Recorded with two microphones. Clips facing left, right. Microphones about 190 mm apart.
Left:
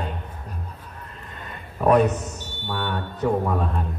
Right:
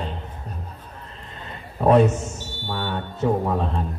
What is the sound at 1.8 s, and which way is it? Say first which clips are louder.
Speech: right 2 dB; 25° right (ahead or behind).